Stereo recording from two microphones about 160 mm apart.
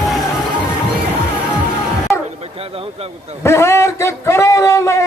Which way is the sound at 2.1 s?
15° left (ahead or behind).